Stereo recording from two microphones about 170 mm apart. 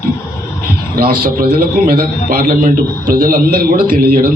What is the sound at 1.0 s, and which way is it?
A man's voice, 60° right (ahead or behind).